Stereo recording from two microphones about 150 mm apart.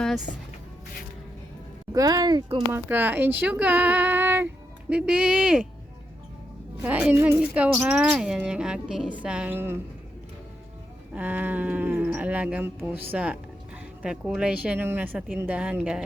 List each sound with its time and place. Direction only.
1.9 s speech: 25° right (ahead or behind)
2.7 s speech: 10° right (ahead or behind)
6.8 s speech: 10° right (ahead or behind)
11.1 s speech: 10° right (ahead or behind)